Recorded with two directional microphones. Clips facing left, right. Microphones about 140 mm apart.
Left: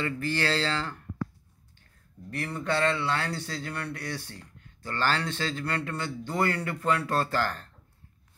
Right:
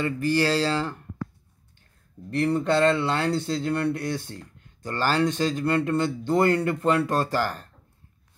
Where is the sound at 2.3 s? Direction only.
25° right (ahead or behind); by 7.7 s 10° right (ahead or behind).